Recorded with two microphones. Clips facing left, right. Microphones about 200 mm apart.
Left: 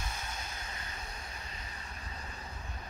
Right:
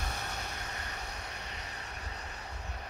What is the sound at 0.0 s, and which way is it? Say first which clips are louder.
Vehicle: right 3 dB; 65° right (ahead or behind).